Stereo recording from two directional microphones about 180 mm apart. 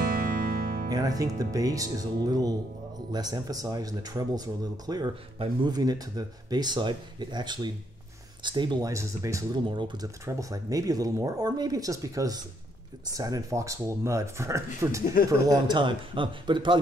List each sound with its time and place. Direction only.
0.2 s music: 55° right (ahead or behind)
0.8 s speech: 20° right (ahead or behind)